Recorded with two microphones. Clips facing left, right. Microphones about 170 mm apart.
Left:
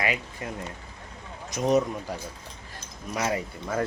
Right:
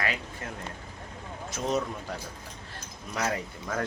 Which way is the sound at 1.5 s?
15° left (ahead or behind).